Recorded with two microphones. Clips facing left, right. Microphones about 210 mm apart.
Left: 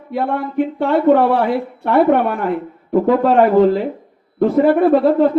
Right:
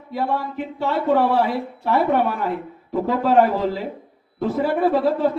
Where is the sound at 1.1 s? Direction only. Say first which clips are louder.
Left 5 dB; 60° left (ahead or behind).